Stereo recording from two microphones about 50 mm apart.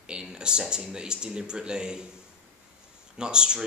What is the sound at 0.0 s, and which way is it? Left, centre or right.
Speech, centre.